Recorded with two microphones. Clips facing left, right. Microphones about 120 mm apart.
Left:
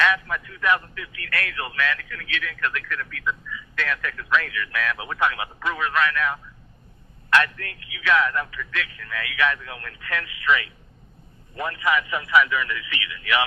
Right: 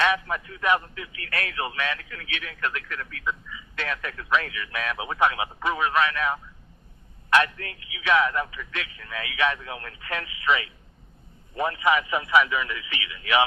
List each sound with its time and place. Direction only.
0.0 s a man's voice: 25° right (ahead or behind)